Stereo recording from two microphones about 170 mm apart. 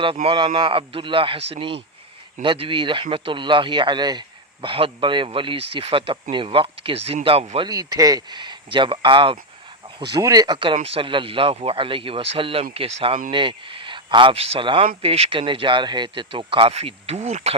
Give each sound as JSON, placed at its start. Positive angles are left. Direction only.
{"t": 0.0, "sound": "speech", "side_deg": -30}
{"t": 7.7, "sound": "speech", "side_deg": -20}